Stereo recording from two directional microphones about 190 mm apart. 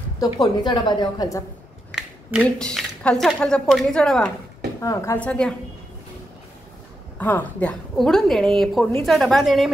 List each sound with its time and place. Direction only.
0.2 s a woman's voice: 20° left (ahead or behind)
1.9 s a sound: 5° right (ahead or behind)
2.4 s a woman's voice: 5° left (ahead or behind)
4.7 s speech: 15° left (ahead or behind)
7.2 s a woman's voice: 10° left (ahead or behind)